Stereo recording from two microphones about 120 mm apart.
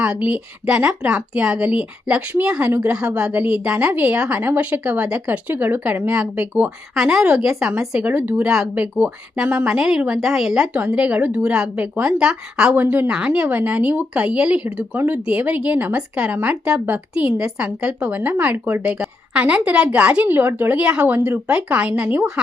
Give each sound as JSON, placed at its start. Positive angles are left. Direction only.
{"t": 0.0, "sound": "a woman's voice", "side_deg": -10}